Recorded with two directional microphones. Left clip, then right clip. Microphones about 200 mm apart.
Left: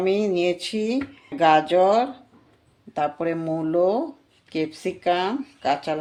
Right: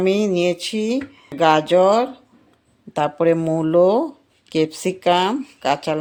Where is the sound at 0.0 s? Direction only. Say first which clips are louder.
Right 3 dB; 35° right (ahead or behind).